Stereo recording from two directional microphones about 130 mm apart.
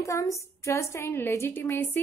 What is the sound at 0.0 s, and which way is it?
A woman's voice, 25° left (ahead or behind).